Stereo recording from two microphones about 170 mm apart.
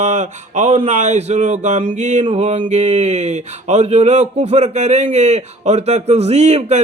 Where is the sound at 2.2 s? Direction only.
40° right (ahead or behind).